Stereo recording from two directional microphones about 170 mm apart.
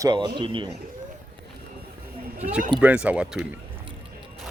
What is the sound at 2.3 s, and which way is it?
Speech, 10° right (ahead or behind).